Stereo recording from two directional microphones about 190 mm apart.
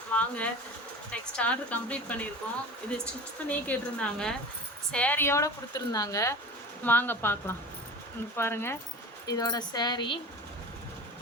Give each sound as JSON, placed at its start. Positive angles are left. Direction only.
{"t": 0.1, "sound": "a woman's voice", "side_deg": 5}
{"t": 3.5, "sound": "a woman's voice", "side_deg": 5}